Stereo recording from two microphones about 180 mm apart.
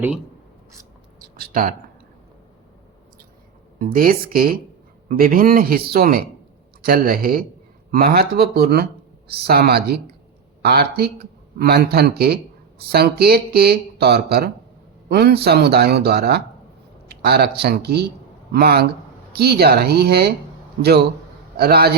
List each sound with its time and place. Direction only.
1.2 s a sound: 55° right (ahead or behind)
3.8 s a man's voice: 50° right (ahead or behind)
21.6 s a man's voice: 60° right (ahead or behind)